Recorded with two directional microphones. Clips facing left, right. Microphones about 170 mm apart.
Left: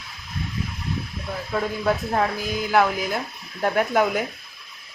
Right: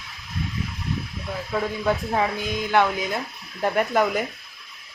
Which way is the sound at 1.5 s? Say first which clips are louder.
Left 1 dB; centre (ahead or behind).